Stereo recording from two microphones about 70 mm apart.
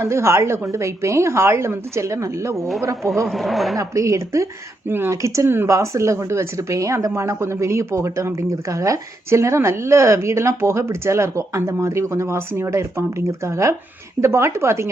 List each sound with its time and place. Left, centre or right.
0.0 s a woman's voice: right
3.2 s speech: centre
3.8 s speech: right
4.9 s a woman's voice: right
5.1 s a woman's voice: right